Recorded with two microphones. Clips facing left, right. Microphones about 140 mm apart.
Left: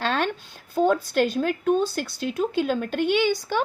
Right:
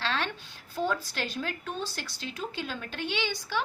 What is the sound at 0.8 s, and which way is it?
Speech, 50° left (ahead or behind).